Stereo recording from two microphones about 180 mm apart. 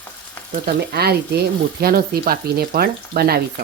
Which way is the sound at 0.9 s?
60° right (ahead or behind).